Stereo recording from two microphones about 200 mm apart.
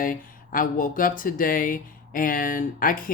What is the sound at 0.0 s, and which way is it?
Speech, 45° left (ahead or behind).